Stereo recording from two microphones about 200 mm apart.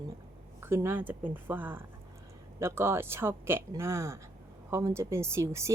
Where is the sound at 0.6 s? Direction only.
10° right (ahead or behind).